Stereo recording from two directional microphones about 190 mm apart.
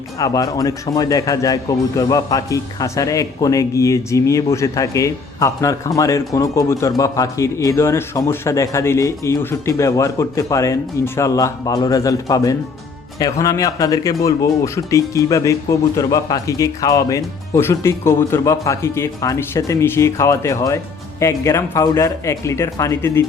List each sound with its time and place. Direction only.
0.2 s a man's voice: 20° left (ahead or behind)